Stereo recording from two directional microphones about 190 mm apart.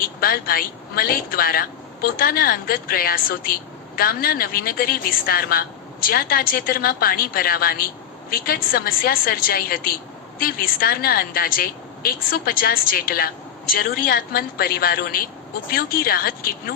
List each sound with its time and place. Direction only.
0.0 s a woman's voice: 50° left (ahead or behind)